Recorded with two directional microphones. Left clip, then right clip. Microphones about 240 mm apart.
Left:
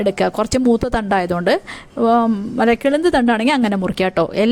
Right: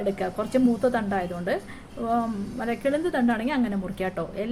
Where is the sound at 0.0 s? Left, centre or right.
Left.